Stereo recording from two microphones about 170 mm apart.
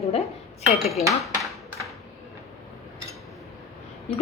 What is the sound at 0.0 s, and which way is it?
Speech, 35° left (ahead or behind).